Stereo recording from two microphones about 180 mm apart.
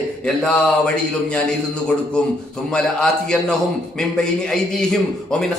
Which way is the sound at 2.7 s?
5° left (ahead or behind).